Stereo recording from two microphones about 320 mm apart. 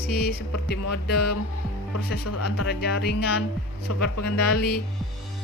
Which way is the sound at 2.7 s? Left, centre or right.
Left.